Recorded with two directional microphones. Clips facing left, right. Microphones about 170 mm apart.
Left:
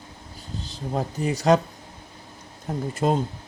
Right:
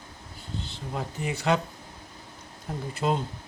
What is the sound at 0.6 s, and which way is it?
Speech, 40° left (ahead or behind).